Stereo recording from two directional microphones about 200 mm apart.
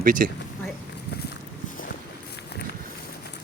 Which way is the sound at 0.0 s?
45° right (ahead or behind).